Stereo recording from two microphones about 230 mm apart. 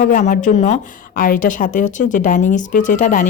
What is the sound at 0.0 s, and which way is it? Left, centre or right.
A woman's voice, left.